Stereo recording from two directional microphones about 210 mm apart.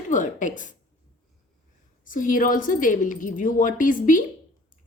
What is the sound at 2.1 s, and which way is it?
A woman's voice, 40° left (ahead or behind).